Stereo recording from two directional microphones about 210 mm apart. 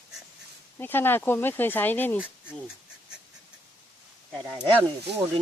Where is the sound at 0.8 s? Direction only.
10° left (ahead or behind).